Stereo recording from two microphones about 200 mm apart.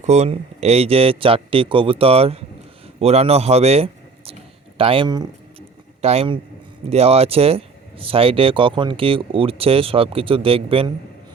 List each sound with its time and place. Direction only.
0.0 s a man's voice: 35° right (ahead or behind)